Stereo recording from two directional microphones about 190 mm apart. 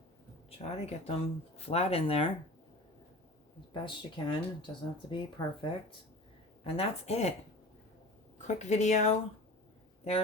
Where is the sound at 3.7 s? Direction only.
25° left (ahead or behind).